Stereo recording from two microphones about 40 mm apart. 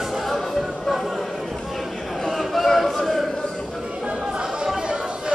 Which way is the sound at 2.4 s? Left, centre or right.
Centre.